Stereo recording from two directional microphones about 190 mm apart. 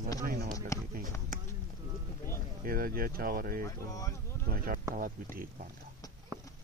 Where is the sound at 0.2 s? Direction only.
50° right (ahead or behind).